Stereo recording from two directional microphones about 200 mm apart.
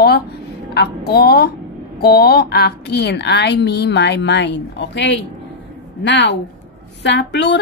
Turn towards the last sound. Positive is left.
turn(degrees=60)  # may be behind; listen again after turning